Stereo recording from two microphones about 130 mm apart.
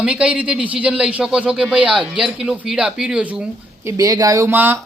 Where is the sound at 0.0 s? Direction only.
10° right (ahead or behind).